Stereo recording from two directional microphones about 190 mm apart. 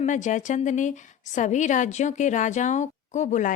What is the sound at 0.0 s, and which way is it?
Speech, 40° left (ahead or behind).